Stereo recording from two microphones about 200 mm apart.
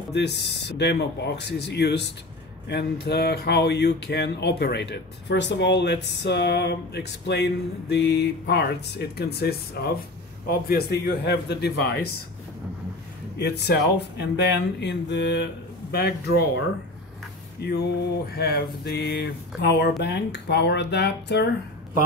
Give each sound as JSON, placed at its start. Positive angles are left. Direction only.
{"t": 0.1, "sound": "speech", "side_deg": 60}
{"t": 13.4, "sound": "speech", "side_deg": 55}
{"t": 17.6, "sound": "speech", "side_deg": 55}